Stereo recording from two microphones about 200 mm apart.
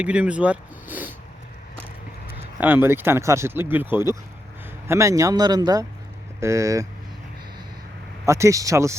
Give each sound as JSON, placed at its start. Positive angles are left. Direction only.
{"t": 0.0, "sound": "speech", "side_deg": -5}
{"t": 2.6, "sound": "speech", "side_deg": -10}
{"t": 8.2, "sound": "speech", "side_deg": -15}